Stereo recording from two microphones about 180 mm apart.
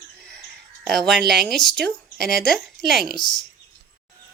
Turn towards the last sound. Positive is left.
turn(degrees=25)  # may be behind; listen again after turning